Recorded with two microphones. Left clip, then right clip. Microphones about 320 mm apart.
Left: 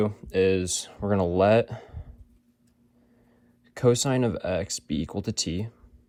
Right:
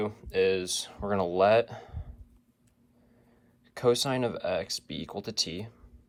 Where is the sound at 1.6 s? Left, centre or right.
Centre.